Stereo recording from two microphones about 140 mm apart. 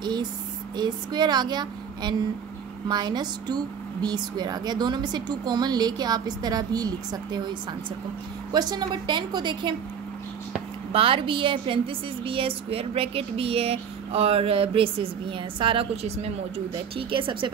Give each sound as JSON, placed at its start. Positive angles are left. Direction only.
{"t": 0.0, "sound": "a woman's voice", "side_deg": -30}
{"t": 8.5, "sound": "a woman's voice", "side_deg": -30}
{"t": 10.9, "sound": "a woman's voice", "side_deg": -40}